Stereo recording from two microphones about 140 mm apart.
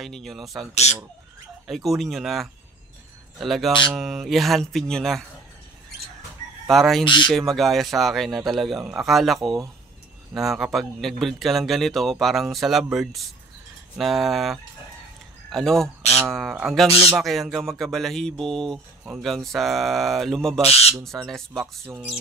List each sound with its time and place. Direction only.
0.0 s speech: centre (ahead or behind)
1.7 s speech: centre (ahead or behind)
6.7 s speech: centre (ahead or behind)
20.6 s speech: 45° left (ahead or behind)
20.9 s speech: 5° left (ahead or behind)